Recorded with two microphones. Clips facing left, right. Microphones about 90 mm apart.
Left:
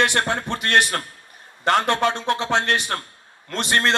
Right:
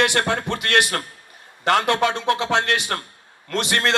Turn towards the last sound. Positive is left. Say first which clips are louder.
# even
turn(degrees=40)  # may be behind; listen again after turning